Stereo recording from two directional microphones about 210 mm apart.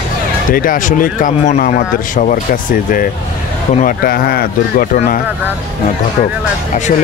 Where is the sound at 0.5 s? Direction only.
40° left (ahead or behind).